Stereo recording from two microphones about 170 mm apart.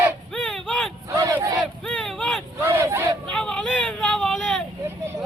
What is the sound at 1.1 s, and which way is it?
Battle cry, 20° right (ahead or behind).